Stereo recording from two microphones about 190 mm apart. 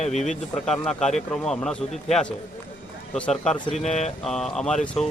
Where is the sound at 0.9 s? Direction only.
5° left (ahead or behind).